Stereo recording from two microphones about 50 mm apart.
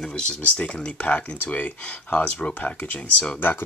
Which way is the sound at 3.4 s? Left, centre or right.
Left.